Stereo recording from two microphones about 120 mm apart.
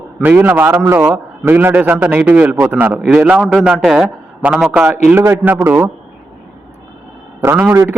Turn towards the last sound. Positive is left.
turn(degrees=-25)  # may be behind; listen again after turning